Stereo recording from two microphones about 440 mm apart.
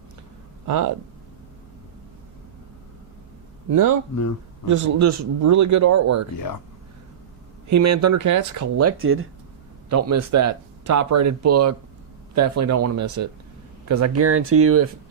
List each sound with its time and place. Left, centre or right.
0.7 s speech: right
3.7 s speech: right
6.3 s speech: left
7.7 s speech: right